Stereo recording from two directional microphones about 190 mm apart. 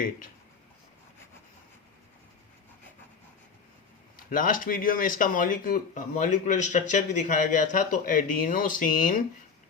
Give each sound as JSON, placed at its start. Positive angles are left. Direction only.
{"t": 4.3, "sound": "speech", "side_deg": 45}